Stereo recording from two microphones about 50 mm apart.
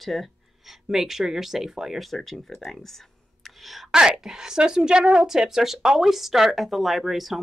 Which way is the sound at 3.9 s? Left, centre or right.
Centre.